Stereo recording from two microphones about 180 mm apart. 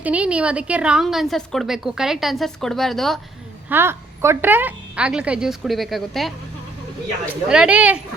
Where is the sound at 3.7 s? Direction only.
15° right (ahead or behind).